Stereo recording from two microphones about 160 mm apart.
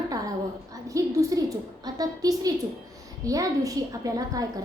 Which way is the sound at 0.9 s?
20° right (ahead or behind).